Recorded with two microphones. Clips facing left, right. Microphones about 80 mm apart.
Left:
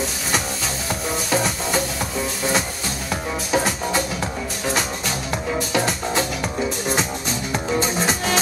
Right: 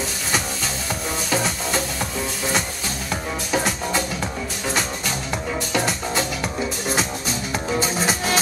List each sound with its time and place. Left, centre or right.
1.3 s music: centre